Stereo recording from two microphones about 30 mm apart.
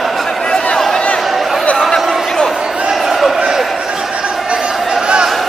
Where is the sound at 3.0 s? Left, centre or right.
Centre.